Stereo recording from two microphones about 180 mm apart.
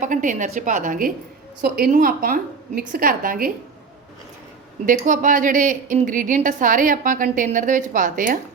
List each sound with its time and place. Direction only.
0.0 s a woman's voice: 45° right (ahead or behind)
4.9 s a woman's voice: 45° right (ahead or behind)